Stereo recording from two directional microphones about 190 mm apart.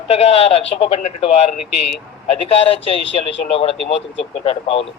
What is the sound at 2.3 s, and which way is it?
A man's voice, 30° left (ahead or behind).